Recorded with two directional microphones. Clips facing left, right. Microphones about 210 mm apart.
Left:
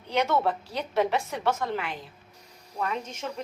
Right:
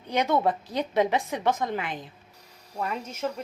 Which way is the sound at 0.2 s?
15° right (ahead or behind).